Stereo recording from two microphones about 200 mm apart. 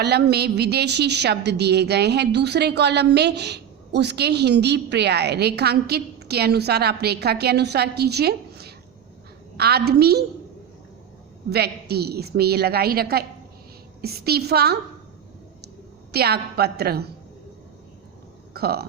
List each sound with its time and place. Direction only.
0.0 s a woman's voice: 55° right (ahead or behind)
11.5 s a woman's voice: 55° right (ahead or behind)
16.1 s a woman's voice: 50° right (ahead or behind)
18.5 s speech: 50° right (ahead or behind)